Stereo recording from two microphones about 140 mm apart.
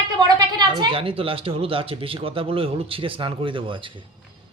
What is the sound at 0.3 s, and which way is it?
Speech, 30° right (ahead or behind).